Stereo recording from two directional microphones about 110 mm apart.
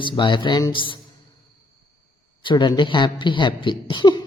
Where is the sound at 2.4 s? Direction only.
45° left (ahead or behind).